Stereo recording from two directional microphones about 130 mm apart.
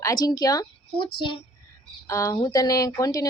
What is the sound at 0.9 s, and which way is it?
Speech, 40° left (ahead or behind).